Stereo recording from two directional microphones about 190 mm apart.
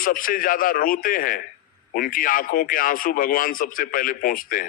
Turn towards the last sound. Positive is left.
turn(degrees=45)  # may be behind; listen again after turning